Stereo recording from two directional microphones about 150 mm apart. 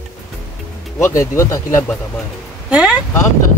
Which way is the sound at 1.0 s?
20° left (ahead or behind).